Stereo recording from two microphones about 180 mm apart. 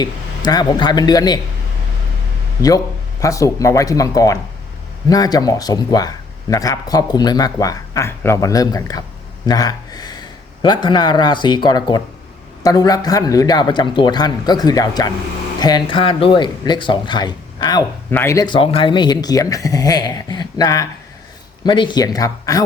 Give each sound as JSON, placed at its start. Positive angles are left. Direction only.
{"t": 0.0, "sound": "speech", "side_deg": 20}
{"t": 2.6, "sound": "speech", "side_deg": 20}
{"t": 18.1, "sound": "speech", "side_deg": 15}